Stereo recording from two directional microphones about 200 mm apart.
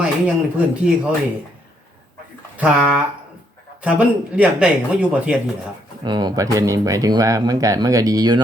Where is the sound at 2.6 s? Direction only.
5° right (ahead or behind).